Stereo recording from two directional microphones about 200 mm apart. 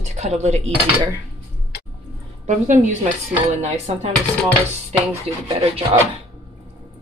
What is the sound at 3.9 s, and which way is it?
Speech, 30° right (ahead or behind).